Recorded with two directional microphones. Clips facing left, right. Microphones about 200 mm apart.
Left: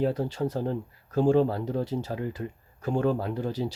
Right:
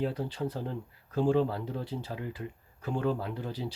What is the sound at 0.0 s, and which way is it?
Speech, 45° left (ahead or behind).